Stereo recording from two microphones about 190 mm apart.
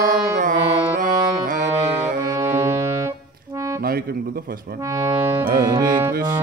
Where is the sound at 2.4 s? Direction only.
15° right (ahead or behind).